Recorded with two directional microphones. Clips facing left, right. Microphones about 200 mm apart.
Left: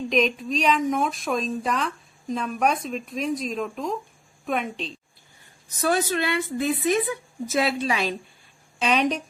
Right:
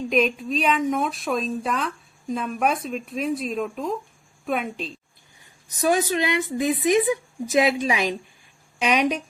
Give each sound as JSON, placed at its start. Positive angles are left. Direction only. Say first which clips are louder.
{"t": 0.1, "sound": "speech", "louder": "right 1 dB", "side_deg": 0}
{"t": 5.4, "sound": "a woman's voice", "louder": "right 2 dB", "side_deg": -15}